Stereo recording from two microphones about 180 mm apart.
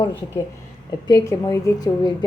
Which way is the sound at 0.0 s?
25° left (ahead or behind).